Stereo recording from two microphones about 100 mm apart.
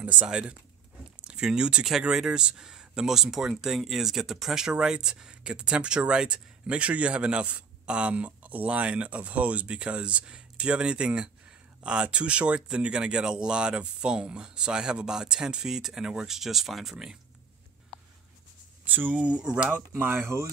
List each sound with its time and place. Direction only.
0.0 s speech: 15° right (ahead or behind)
18.9 s speech: 15° right (ahead or behind)
19.9 s speech: 20° right (ahead or behind)